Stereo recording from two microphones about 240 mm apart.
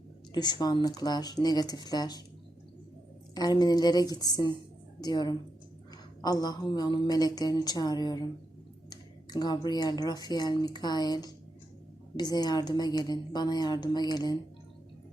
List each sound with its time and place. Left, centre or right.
0.3 s speech: centre
3.3 s a woman's voice: centre